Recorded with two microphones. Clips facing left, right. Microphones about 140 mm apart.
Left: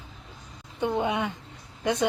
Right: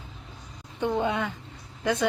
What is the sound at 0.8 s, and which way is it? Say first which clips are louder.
A woman's voice: even; 15° left (ahead or behind).